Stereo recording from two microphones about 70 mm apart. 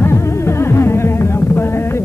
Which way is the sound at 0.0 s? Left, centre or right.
Left.